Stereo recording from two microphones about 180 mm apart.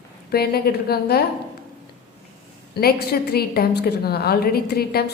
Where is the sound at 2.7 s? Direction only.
60° left (ahead or behind).